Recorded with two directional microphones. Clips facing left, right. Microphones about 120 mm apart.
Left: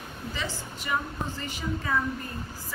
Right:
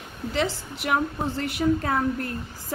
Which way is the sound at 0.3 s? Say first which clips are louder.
Right 9 dB; 75° right (ahead or behind).